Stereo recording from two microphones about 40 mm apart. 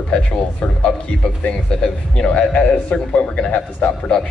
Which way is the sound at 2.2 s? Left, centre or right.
Left.